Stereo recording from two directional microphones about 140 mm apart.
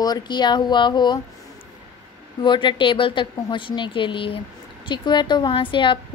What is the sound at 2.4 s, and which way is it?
A woman's voice, 35° left (ahead or behind).